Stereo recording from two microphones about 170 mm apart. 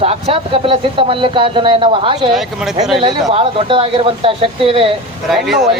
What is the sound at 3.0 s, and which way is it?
Speech, 30° right (ahead or behind).